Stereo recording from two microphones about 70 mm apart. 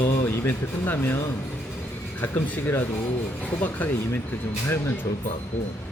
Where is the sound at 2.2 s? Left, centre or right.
Left.